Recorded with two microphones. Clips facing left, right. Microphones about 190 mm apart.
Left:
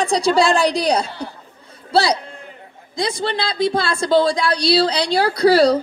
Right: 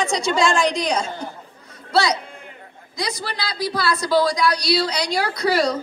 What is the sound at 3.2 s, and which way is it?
Speech, 25° left (ahead or behind).